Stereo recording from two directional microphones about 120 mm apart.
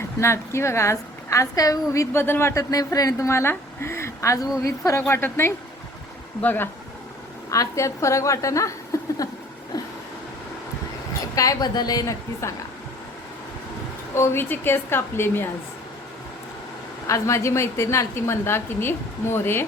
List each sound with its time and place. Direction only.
0.2 s a woman's voice: 25° left (ahead or behind)
7.5 s a woman's voice: 25° left (ahead or behind)
9.7 s a sound: 30° left (ahead or behind)
11.3 s a woman's voice: 30° left (ahead or behind)
14.2 s a woman's voice: 20° left (ahead or behind)
17.1 s a woman's voice: 25° left (ahead or behind)